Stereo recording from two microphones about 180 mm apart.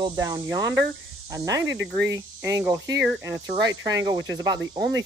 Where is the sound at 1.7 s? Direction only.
80° right.